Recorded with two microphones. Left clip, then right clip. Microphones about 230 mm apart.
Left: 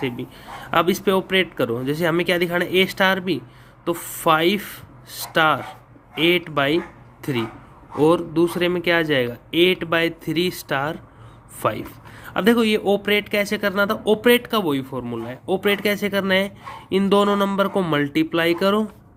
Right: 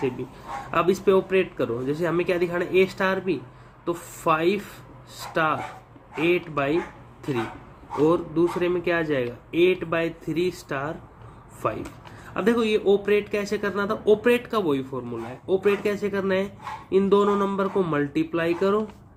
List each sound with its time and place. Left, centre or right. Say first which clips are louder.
0.7 s speech: left 2 dB; left
8.0 s speech: left 4 dB; left